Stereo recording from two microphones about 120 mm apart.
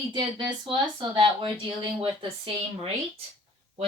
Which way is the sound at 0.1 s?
40° right (ahead or behind).